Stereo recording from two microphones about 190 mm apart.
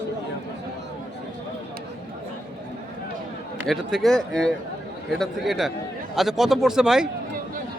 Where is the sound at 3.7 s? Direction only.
Centre (ahead or behind).